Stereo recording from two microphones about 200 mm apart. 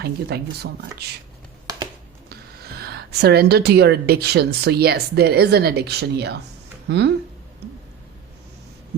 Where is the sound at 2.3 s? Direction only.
50° right (ahead or behind).